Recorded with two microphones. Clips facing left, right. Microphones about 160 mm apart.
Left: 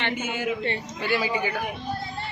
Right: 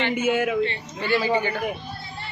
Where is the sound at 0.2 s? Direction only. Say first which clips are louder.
Right 7 dB; 60° right (ahead or behind).